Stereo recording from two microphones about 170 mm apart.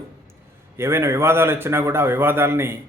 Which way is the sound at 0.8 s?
15° right (ahead or behind).